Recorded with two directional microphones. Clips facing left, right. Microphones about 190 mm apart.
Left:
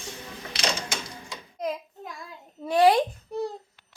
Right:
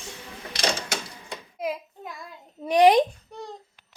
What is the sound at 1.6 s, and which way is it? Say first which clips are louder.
Hands: even; 5° right (ahead or behind).